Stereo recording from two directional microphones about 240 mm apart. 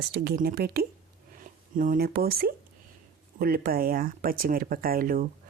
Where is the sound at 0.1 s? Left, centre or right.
Right.